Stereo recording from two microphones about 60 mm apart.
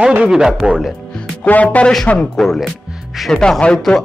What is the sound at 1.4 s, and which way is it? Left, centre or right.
Speech, left.